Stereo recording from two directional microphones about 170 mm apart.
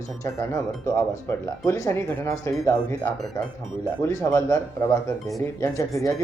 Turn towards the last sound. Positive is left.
turn(degrees=20)  # may be behind; listen again after turning